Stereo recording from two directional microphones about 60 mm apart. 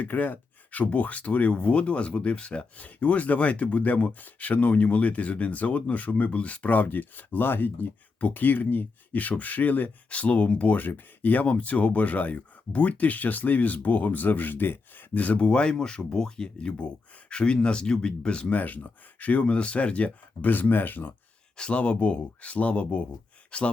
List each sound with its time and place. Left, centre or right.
0.0 s speech: left
21.6 s speech: left